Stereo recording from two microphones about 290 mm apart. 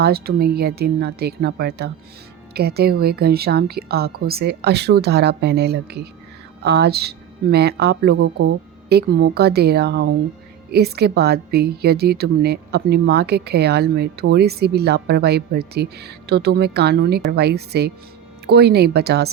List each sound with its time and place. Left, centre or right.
0.0 s a woman's voice: right